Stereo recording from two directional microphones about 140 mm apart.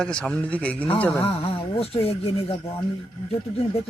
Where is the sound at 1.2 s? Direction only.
45° left (ahead or behind).